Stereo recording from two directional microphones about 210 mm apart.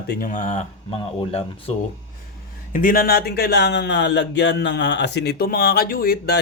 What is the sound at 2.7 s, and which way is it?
Speech, 40° left (ahead or behind).